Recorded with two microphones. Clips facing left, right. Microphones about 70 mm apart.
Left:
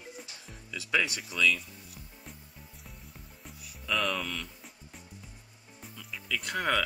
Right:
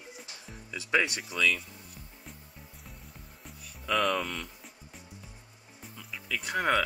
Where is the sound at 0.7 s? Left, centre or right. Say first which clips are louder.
Right 2 dB; right.